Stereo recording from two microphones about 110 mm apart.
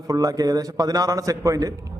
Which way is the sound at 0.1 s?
35° right (ahead or behind).